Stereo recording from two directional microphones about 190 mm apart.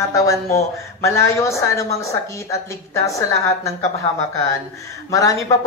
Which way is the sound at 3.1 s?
15° left (ahead or behind).